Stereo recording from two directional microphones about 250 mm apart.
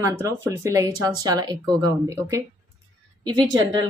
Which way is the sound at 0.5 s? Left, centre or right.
Centre.